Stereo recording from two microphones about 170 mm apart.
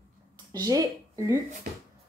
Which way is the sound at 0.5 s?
20° right (ahead or behind).